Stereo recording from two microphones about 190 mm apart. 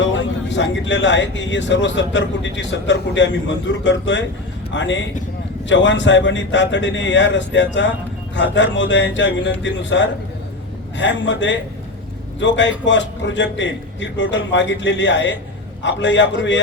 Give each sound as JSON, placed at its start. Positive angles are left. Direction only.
{"t": 0.0, "sound": "speech", "side_deg": 75}